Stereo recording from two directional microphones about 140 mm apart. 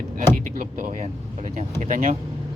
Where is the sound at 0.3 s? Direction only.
75° right (ahead or behind).